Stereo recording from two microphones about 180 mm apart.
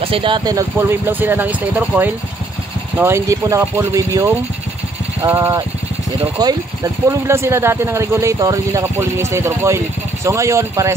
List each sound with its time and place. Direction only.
0.0 s speech: 30° right (ahead or behind)